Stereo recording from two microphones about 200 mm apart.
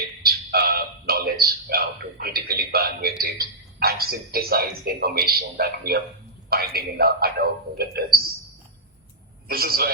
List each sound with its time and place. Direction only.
0.0 s music: 50° right (ahead or behind)
0.5 s a sound: 50° right (ahead or behind)
3.2 s a man's voice: 50° right (ahead or behind)
9.5 s a man's voice: 50° right (ahead or behind)